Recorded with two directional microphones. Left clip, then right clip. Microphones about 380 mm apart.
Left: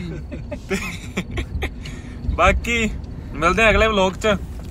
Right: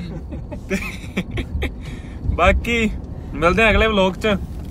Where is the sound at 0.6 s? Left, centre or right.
Centre.